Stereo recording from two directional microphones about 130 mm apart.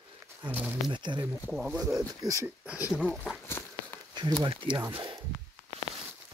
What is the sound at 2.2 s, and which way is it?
Speech, 25° right (ahead or behind).